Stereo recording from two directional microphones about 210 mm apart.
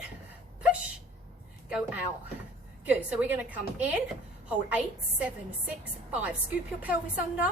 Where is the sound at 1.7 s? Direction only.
5° right (ahead or behind).